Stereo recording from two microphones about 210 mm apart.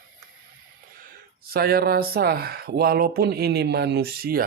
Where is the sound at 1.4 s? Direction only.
45° right (ahead or behind).